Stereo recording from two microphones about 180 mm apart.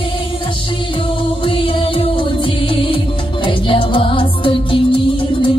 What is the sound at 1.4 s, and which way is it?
Music, 30° left (ahead or behind).